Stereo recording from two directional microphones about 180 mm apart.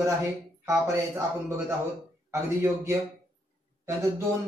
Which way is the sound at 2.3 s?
15° right (ahead or behind).